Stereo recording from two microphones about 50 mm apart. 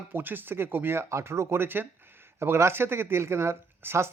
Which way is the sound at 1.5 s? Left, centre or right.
Right.